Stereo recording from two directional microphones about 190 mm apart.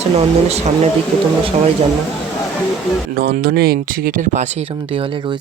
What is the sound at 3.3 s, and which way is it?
Speech, 55° right (ahead or behind).